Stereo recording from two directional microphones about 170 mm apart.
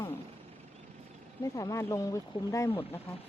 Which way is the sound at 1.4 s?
20° left (ahead or behind).